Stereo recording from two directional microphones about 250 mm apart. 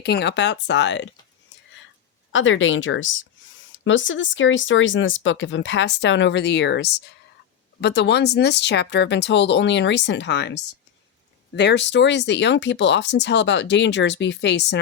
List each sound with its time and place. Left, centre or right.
0.0 s speech: left
2.3 s speech: left